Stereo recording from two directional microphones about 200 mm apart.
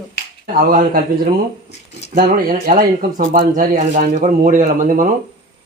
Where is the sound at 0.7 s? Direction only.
45° right (ahead or behind).